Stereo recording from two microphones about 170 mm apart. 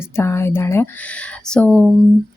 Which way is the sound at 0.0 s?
15° left (ahead or behind).